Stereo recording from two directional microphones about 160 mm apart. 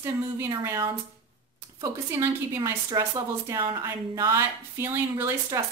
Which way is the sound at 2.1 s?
15° right (ahead or behind).